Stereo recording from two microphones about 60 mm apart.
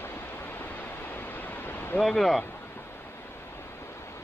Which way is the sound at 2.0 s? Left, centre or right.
Centre.